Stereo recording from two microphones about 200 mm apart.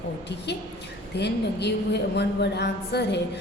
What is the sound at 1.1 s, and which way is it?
A woman's voice, 60° left (ahead or behind).